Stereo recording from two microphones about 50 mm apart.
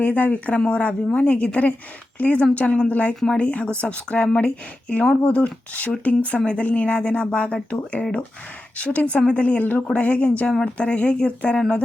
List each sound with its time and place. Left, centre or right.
0.0 s speech: left
8.8 s speech: left